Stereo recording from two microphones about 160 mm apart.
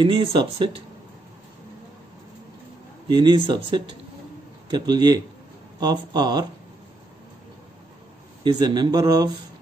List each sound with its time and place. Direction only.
0.0 s speech: 30° right (ahead or behind)
3.1 s speech: 30° right (ahead or behind)
8.5 s speech: 25° right (ahead or behind)